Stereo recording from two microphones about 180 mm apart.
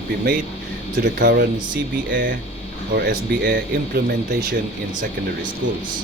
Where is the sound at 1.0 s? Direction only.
60° right (ahead or behind).